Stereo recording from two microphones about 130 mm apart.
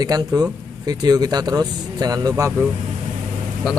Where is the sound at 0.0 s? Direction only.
30° right (ahead or behind).